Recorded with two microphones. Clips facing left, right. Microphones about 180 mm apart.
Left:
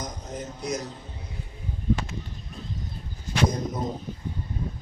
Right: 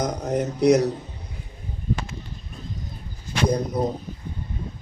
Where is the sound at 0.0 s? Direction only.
70° right (ahead or behind).